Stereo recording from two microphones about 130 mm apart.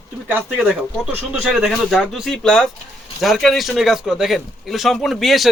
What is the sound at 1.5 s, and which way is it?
Speech, centre (ahead or behind).